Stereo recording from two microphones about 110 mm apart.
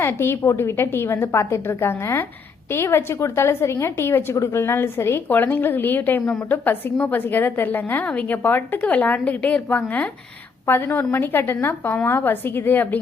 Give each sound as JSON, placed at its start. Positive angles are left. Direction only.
{"t": 0.0, "sound": "a woman's voice", "side_deg": 20}